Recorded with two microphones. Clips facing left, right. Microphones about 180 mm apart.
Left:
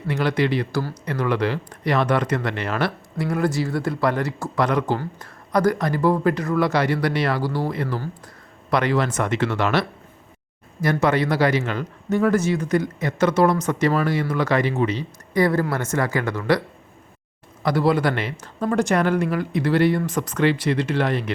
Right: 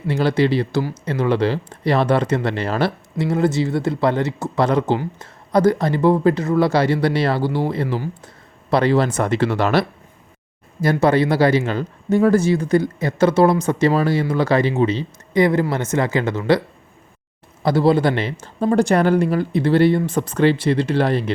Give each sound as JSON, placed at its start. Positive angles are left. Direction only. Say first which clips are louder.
{"t": 0.1, "sound": "a man's voice", "louder": "right 4 dB", "side_deg": -30}